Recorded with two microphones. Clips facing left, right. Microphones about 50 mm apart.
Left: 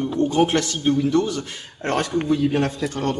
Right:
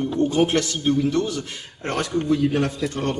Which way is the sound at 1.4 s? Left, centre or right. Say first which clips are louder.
Left 2 dB; left.